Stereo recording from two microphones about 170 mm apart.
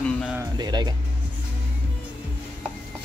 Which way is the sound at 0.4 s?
25° right (ahead or behind).